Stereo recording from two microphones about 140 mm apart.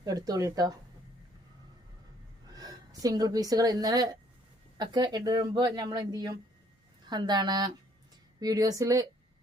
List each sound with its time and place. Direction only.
0.0 s speech: 25° right (ahead or behind)
2.5 s a woman's voice: 25° right (ahead or behind)